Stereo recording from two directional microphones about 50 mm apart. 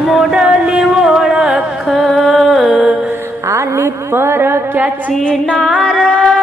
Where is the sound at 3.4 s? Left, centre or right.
Right.